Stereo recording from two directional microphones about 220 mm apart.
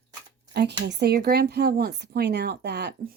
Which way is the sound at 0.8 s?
50° right (ahead or behind).